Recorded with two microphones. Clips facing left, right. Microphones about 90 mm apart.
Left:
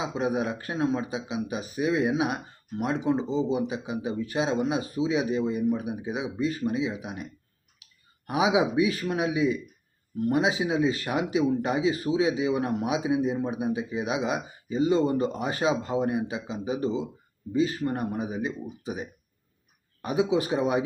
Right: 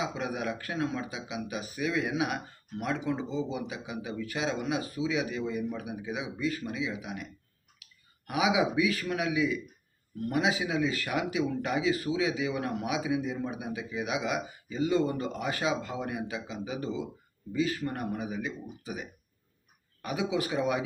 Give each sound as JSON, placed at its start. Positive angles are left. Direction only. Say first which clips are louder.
{"t": 0.0, "sound": "speech", "louder": "left 5 dB", "side_deg": 25}
{"t": 8.3, "sound": "speech", "louder": "left 3 dB", "side_deg": 30}